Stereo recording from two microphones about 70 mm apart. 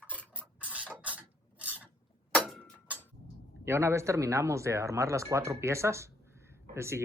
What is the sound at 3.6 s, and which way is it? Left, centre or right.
Speech, right.